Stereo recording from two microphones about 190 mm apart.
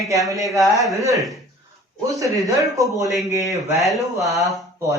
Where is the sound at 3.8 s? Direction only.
Centre (ahead or behind).